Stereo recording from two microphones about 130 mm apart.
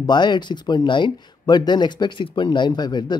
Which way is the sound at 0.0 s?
35° left (ahead or behind).